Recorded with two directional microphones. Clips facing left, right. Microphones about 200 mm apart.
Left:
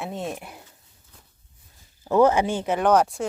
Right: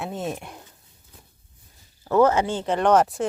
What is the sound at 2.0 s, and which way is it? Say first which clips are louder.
Speech: even; 15° left (ahead or behind).